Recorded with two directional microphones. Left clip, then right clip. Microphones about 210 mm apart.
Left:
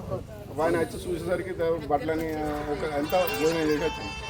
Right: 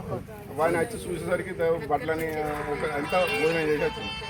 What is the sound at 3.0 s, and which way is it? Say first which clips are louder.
Speech: even; 40° left (ahead or behind).